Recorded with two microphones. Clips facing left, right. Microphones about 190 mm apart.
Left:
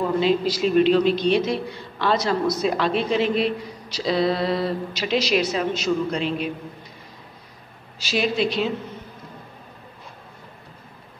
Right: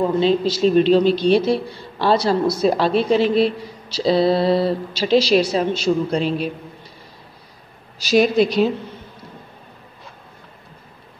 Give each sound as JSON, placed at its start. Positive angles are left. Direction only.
{"t": 0.0, "sound": "a man's voice", "side_deg": -30}
{"t": 8.0, "sound": "a man's voice", "side_deg": -40}